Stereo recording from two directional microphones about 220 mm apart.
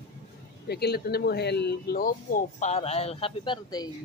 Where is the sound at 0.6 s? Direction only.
45° left (ahead or behind); by 3.9 s 20° left (ahead or behind).